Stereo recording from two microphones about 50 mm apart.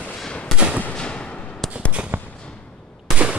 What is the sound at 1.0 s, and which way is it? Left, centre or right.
Fireworks, left.